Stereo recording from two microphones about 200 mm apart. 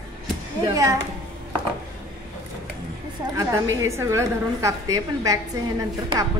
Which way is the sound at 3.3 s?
15° right (ahead or behind).